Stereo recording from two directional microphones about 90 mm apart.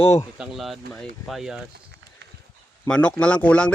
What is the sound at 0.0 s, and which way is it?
Speech, 35° left (ahead or behind).